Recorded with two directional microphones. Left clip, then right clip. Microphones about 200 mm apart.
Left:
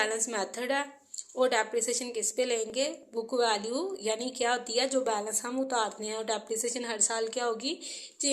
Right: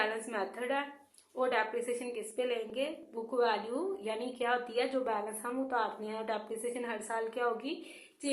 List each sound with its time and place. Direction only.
0.0 s speech: 40° left (ahead or behind)